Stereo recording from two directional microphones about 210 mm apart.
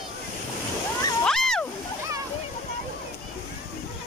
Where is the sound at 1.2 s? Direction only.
Centre (ahead or behind).